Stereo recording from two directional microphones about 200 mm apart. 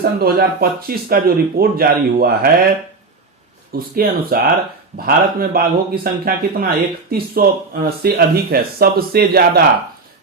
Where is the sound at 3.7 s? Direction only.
45° right (ahead or behind).